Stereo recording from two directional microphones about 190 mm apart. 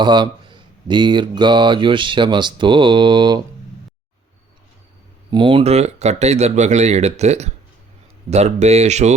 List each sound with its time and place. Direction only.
0.0 s speech: 25° right (ahead or behind)
5.3 s speech: 25° right (ahead or behind)